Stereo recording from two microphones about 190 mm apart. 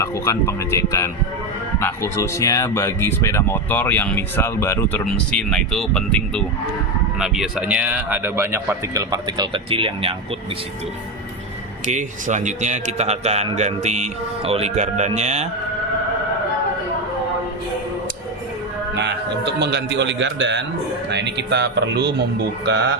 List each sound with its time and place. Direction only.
0.0 s speech: 15° left (ahead or behind); by 10.2 s 30° right (ahead or behind)
11.9 s a man's voice: 40° right (ahead or behind)
18.9 s a man's voice: 65° right (ahead or behind)